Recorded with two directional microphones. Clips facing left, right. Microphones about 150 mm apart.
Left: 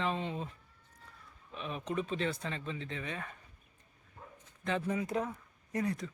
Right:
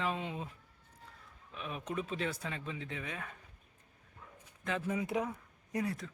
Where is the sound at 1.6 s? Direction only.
5° right (ahead or behind).